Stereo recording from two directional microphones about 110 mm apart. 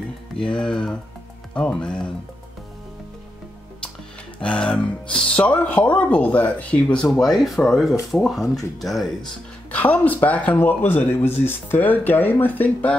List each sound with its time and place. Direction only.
0.4 s speech: 10° left (ahead or behind)
4.4 s speech: 10° left (ahead or behind)
9.7 s speech: 15° left (ahead or behind)